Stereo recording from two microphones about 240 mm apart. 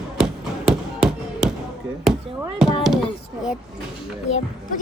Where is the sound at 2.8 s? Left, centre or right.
Centre.